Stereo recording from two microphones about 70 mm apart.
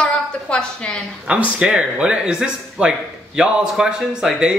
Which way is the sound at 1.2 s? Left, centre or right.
Centre.